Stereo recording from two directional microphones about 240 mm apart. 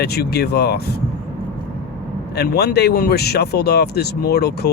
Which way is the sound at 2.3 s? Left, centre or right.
Left.